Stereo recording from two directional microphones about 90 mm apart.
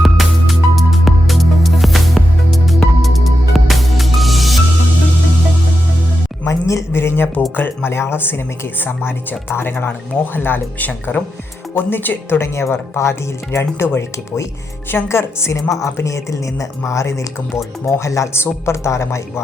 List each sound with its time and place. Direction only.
0.0 s music: centre (ahead or behind)
6.4 s a sound: 35° left (ahead or behind)
7.5 s speech: 20° left (ahead or behind)
9.5 s a woman's voice: 25° left (ahead or behind)